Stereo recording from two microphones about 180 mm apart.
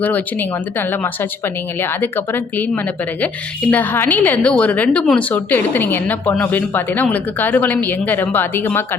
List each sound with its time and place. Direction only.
0.0 s a woman's voice: 10° left (ahead or behind)